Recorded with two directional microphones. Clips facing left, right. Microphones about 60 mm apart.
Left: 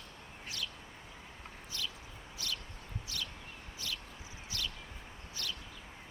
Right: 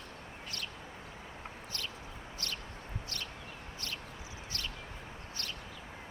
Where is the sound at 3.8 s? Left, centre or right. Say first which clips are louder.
Left 1 dB; right.